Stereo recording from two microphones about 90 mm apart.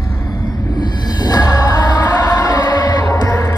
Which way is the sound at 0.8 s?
50° left (ahead or behind).